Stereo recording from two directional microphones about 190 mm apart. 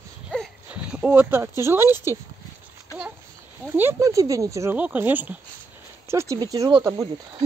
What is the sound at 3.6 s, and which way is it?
Speech, 10° right (ahead or behind).